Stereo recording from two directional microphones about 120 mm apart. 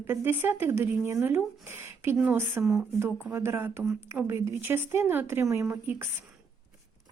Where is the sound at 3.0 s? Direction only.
20° right (ahead or behind).